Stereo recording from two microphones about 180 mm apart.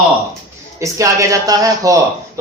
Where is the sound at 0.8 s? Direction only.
20° right (ahead or behind).